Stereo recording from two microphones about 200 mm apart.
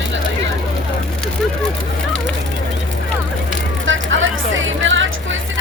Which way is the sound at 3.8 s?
70° right (ahead or behind).